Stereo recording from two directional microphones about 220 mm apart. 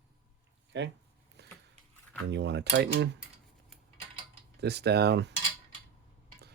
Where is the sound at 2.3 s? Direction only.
50° right (ahead or behind).